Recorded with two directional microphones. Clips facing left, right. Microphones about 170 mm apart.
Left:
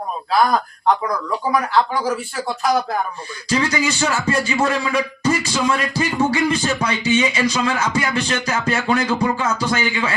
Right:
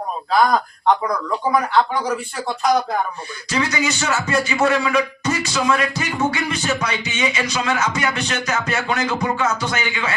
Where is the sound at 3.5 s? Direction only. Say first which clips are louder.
Left 2 dB; 30° left (ahead or behind).